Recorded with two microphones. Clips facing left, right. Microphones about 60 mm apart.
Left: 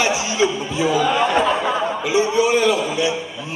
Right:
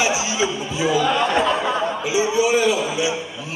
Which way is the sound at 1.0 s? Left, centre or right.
Centre.